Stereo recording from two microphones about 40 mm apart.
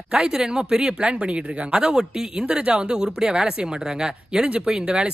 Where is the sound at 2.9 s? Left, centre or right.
Centre.